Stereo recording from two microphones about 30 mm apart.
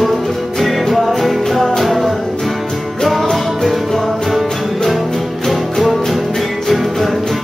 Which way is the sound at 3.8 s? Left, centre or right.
Centre.